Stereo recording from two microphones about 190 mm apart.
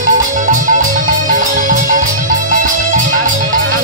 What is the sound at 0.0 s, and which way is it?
Music, 45° right (ahead or behind).